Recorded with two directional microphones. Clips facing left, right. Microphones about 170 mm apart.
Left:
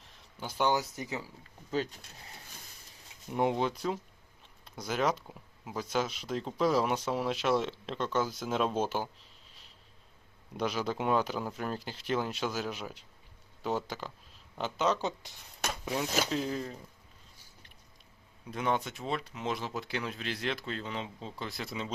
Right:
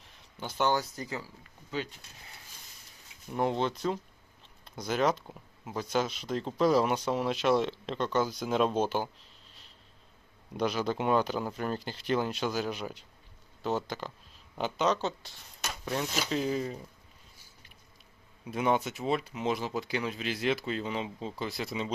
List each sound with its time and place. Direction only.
0.3 s speech: 10° left (ahead or behind)
3.3 s speech: 10° left (ahead or behind)
10.5 s speech: centre (ahead or behind)
15.2 s speech: 20° left (ahead or behind)
16.3 s speech: 5° right (ahead or behind)
18.5 s speech: 10° right (ahead or behind)